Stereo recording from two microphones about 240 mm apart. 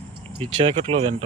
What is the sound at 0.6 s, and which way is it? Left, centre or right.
Speech, right.